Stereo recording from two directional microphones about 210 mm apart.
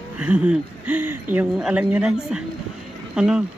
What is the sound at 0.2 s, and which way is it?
Speech, 5° right (ahead or behind).